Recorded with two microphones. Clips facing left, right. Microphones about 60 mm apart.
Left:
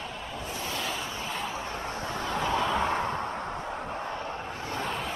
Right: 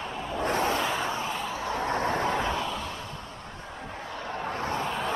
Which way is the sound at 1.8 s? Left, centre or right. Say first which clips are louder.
Right 6 dB; right.